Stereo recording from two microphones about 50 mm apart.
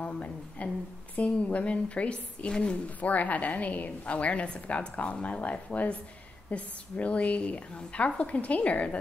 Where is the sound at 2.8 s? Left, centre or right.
Left.